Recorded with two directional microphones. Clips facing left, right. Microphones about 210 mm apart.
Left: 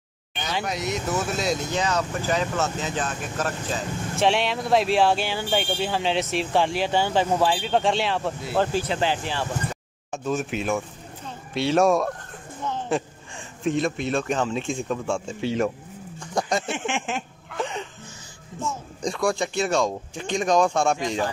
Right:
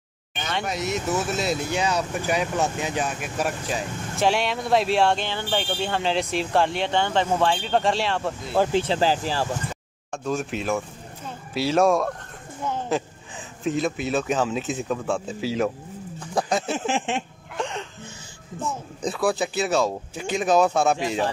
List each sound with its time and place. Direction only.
0.3 s speech: centre (ahead or behind)
4.2 s speech: centre (ahead or behind)
8.7 s speech: 30° right (ahead or behind)
10.1 s speech: centre (ahead or behind)
16.2 s wild animals: centre (ahead or behind)
16.7 s speech: 35° right (ahead or behind)
17.6 s speech: centre (ahead or behind)
18.9 s speech: 5° right (ahead or behind)